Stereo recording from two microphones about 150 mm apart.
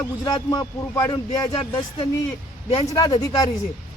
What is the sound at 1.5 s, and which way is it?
Speech, 35° left (ahead or behind).